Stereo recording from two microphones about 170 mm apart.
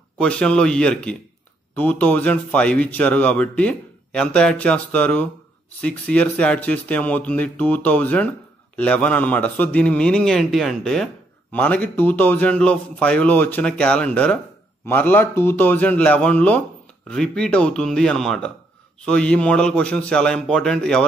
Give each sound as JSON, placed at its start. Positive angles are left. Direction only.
{"t": 0.2, "sound": "a man's voice", "side_deg": 5}